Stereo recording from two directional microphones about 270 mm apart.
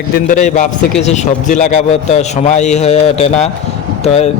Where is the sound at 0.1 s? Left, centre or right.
Left.